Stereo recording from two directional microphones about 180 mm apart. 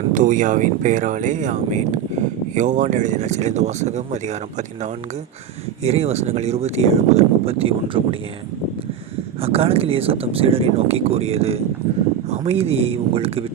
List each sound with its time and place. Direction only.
0.1 s speech: 45° right (ahead or behind); by 8.2 s 30° right (ahead or behind)
9.4 s speech: 30° right (ahead or behind)